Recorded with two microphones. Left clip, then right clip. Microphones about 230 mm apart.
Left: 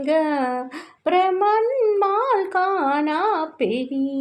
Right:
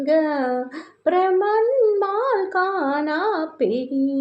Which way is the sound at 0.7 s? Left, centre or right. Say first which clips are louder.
Even; left.